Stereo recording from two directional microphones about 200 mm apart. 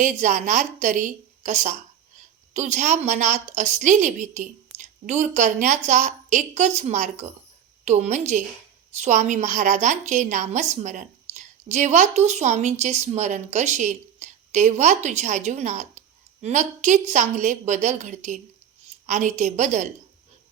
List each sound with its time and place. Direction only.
0.0 s a woman's voice: 40° right (ahead or behind)